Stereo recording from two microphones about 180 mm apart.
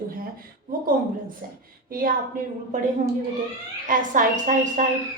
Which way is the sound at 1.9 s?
50° right (ahead or behind).